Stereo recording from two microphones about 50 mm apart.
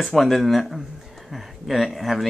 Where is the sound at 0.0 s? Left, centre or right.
Centre.